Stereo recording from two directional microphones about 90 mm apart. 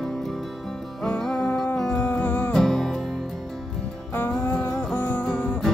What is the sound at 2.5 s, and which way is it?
Music, 5° left (ahead or behind).